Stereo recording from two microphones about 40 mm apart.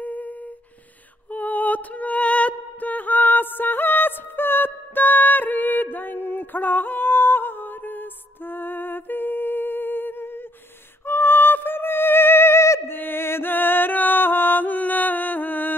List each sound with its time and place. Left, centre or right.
0.0 s a sound: left
1.3 s music: left
13.0 s music: left